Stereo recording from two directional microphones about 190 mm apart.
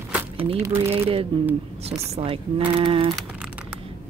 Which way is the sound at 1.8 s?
30° right (ahead or behind).